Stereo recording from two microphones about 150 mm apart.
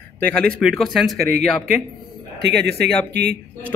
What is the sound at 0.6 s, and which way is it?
Speech, centre (ahead or behind).